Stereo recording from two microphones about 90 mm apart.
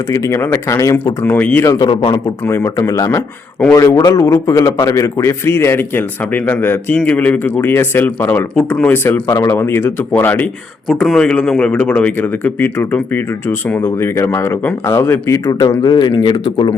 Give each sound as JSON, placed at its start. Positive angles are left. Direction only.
{"t": 0.3, "sound": "speech", "side_deg": 30}
{"t": 1.2, "sound": "a man's voice", "side_deg": 20}
{"t": 1.8, "sound": "speech", "side_deg": 65}
{"t": 2.7, "sound": "a man's voice", "side_deg": 40}
{"t": 9.2, "sound": "a man's voice", "side_deg": 35}
{"t": 10.8, "sound": "a man's voice", "side_deg": 5}
{"t": 15.4, "sound": "speech", "side_deg": 40}